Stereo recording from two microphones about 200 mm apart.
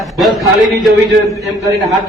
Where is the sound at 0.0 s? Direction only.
Centre (ahead or behind).